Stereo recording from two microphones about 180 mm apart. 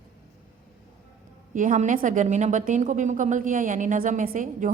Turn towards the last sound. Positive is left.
turn(degrees=-45)  # may be behind; listen again after turning